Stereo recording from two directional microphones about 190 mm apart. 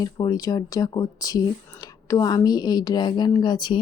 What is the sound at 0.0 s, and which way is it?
Speech, 20° left (ahead or behind).